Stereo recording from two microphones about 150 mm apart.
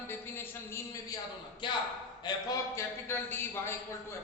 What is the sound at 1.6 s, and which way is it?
A man's voice, 30° left (ahead or behind).